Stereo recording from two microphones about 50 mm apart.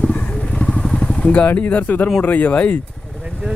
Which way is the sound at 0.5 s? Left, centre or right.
Centre.